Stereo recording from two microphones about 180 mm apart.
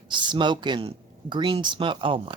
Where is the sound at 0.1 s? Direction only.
25° right (ahead or behind).